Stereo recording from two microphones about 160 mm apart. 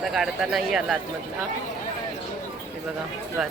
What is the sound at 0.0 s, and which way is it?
Speech, centre (ahead or behind).